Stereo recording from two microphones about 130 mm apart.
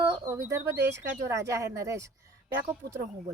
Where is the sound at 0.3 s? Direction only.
20° right (ahead or behind).